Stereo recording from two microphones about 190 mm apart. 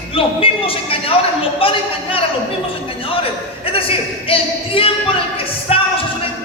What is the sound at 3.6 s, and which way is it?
Speech, 30° left (ahead or behind).